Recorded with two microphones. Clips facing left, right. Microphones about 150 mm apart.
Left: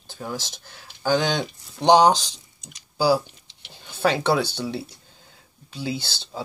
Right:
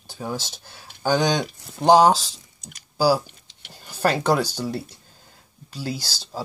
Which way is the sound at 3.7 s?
10° right (ahead or behind).